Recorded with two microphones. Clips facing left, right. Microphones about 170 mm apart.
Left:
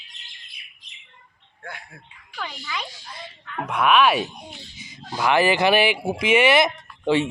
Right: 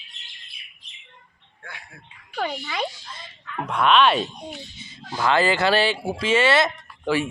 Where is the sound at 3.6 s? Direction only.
10° left (ahead or behind).